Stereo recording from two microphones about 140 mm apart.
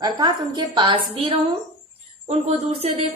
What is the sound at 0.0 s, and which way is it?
A woman's voice, 30° right (ahead or behind).